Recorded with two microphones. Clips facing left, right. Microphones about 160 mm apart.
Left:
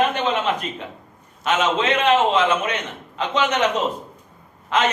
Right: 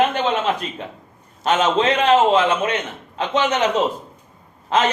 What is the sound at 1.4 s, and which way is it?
A man's voice, 35° right (ahead or behind).